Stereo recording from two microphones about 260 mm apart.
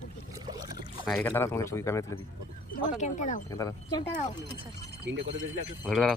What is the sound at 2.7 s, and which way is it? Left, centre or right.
Speech, left.